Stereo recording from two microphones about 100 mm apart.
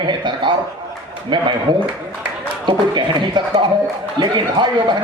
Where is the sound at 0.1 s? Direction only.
50° right (ahead or behind).